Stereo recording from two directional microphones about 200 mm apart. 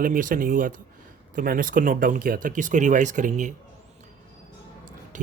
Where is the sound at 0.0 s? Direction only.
45° right (ahead or behind).